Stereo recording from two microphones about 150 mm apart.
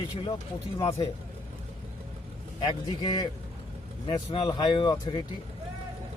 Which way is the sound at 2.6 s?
30° left (ahead or behind).